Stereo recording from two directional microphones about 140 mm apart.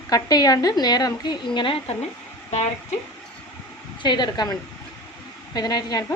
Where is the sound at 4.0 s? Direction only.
30° left (ahead or behind).